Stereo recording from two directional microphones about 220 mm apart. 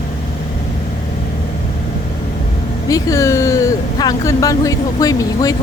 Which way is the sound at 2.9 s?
15° left (ahead or behind).